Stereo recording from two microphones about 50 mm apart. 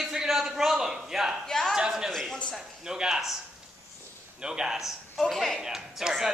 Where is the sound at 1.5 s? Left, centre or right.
Centre.